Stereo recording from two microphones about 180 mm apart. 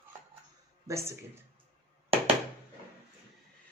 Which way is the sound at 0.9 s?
15° right (ahead or behind).